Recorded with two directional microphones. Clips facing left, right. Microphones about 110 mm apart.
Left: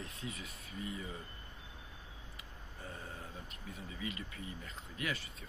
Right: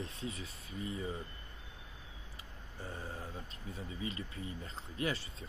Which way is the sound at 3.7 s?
30° right (ahead or behind).